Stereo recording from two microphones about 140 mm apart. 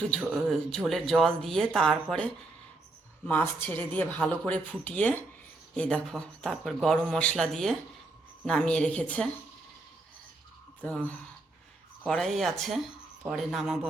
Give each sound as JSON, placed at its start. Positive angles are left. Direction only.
{"t": 0.1, "sound": "a man's voice", "side_deg": 5}
{"t": 10.8, "sound": "a man's voice", "side_deg": 10}